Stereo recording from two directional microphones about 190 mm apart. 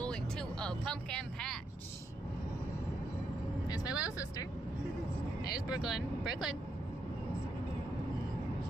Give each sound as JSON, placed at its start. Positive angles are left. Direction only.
{"t": 0.0, "sound": "music", "side_deg": 5}
{"t": 3.6, "sound": "vehicle", "side_deg": 20}
{"t": 5.7, "sound": "speech", "side_deg": -5}